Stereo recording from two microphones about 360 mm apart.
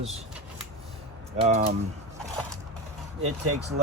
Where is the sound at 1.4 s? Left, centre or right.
Centre.